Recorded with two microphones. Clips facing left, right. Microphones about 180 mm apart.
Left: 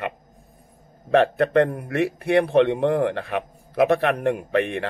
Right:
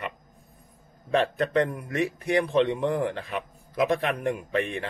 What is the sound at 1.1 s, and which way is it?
A man's voice, 65° left (ahead or behind).